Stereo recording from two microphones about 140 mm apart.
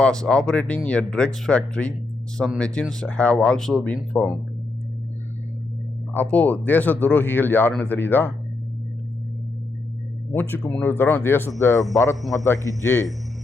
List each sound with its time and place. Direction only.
0.0 s speech: 5° left (ahead or behind)
6.1 s speech: 10° left (ahead or behind)
10.3 s a man's voice: 10° left (ahead or behind)